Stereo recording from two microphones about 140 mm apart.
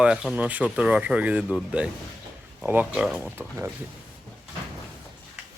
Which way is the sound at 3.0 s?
Centre (ahead or behind).